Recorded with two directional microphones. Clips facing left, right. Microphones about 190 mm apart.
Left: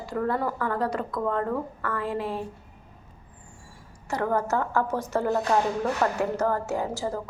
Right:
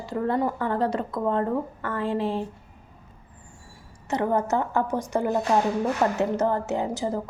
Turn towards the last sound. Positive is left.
turn(degrees=-20)  # may be behind; listen again after turning